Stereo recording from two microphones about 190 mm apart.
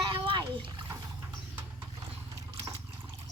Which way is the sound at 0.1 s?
25° right (ahead or behind).